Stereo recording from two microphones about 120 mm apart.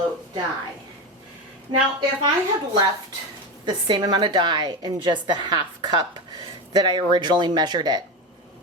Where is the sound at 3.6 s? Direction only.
40° right (ahead or behind).